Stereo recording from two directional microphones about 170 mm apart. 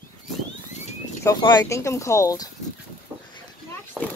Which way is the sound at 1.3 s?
25° left (ahead or behind).